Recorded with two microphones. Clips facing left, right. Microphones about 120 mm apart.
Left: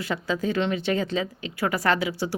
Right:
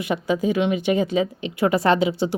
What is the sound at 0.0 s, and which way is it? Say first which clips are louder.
A woman's voice: right 5 dB; 20° right (ahead or behind).